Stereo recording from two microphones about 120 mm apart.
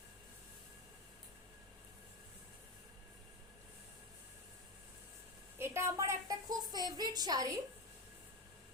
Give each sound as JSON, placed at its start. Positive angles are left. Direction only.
{"t": 5.5, "sound": "a woman's voice", "side_deg": -20}